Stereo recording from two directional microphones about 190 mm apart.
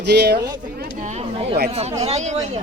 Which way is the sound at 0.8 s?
40° right (ahead or behind).